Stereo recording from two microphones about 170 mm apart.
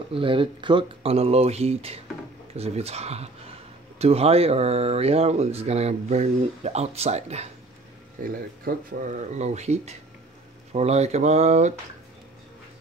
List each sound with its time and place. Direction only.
0.1 s speech: 30° right (ahead or behind)
8.2 s speech: 55° right (ahead or behind)